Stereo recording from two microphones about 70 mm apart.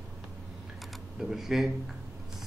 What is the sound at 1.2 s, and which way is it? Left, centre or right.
Speech, centre.